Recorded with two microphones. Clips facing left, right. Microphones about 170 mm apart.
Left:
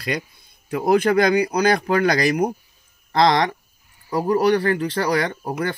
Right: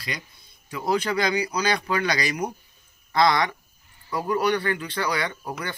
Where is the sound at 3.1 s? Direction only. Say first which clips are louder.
Left 4 dB; 40° left (ahead or behind).